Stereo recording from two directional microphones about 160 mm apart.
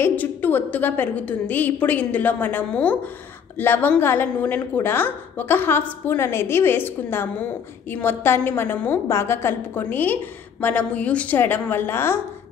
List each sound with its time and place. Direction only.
0.0 s a woman's voice: 10° left (ahead or behind)